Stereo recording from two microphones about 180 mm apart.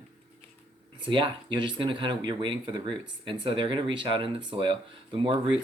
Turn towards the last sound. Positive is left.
turn(degrees=-25)  # may be behind; listen again after turning